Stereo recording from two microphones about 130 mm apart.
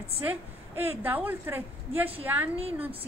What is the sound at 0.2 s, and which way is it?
A woman's voice, 15° right (ahead or behind).